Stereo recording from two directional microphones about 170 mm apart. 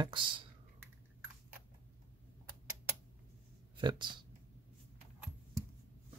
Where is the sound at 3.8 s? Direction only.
25° right (ahead or behind).